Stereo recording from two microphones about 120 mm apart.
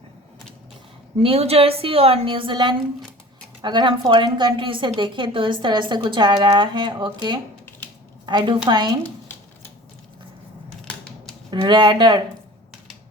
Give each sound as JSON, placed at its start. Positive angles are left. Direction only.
{"t": 1.2, "sound": "a woman's voice", "side_deg": -55}
{"t": 9.0, "sound": "a sound", "side_deg": 20}
{"t": 11.5, "sound": "a woman's voice", "side_deg": -40}